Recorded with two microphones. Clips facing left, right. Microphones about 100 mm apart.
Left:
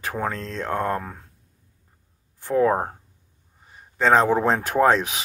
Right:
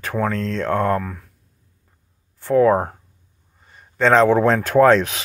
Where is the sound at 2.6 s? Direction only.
25° left (ahead or behind).